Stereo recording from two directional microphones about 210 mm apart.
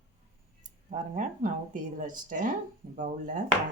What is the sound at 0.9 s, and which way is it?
Speech, 35° right (ahead or behind).